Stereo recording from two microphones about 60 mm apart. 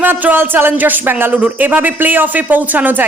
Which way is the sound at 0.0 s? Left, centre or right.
Right.